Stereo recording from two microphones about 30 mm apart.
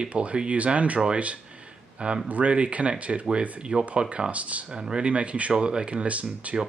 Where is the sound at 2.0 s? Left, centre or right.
Right.